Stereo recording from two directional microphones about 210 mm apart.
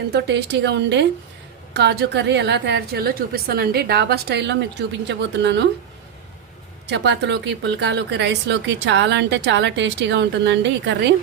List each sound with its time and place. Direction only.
0.1 s a woman's voice: 55° right (ahead or behind)
6.8 s a woman's voice: 55° right (ahead or behind)